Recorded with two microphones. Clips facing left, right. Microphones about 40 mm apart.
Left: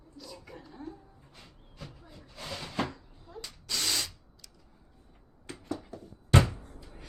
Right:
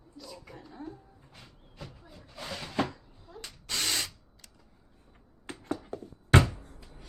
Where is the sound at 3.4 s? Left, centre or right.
Right.